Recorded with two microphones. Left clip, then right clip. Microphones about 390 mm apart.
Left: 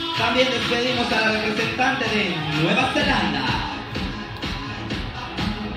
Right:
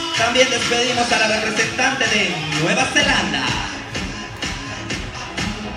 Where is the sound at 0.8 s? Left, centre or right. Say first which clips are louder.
Right 5 dB; right.